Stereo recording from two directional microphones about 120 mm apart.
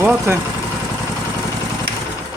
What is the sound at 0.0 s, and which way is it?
Speech, 15° right (ahead or behind).